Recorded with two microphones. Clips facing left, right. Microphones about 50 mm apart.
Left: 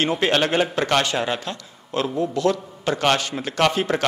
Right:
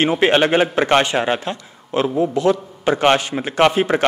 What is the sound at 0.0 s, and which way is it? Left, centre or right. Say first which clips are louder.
A man's voice: right 5 dB; right.